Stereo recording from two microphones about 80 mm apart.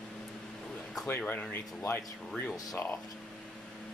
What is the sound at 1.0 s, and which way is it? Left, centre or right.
Speech, left.